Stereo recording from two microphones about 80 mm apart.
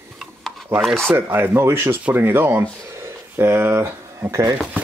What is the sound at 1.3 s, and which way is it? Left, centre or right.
Speech, right.